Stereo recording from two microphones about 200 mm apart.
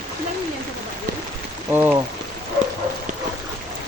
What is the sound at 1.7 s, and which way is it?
Rain, 10° right (ahead or behind).